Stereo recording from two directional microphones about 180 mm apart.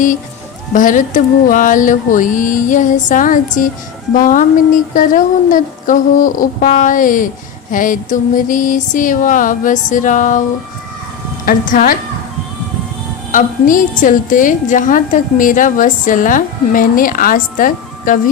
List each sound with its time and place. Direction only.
0.7 s a woman's voice: 45° left (ahead or behind)
11.4 s a woman's voice: 50° left (ahead or behind)
13.3 s a woman's voice: 45° left (ahead or behind)